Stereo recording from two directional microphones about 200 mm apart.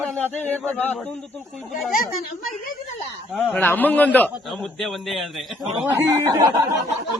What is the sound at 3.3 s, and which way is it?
A man's voice, 5° left (ahead or behind).